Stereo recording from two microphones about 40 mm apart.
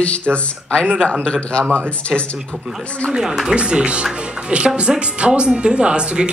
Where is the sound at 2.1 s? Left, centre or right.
Centre.